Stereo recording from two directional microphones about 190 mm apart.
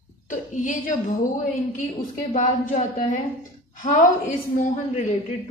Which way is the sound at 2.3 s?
40° left (ahead or behind).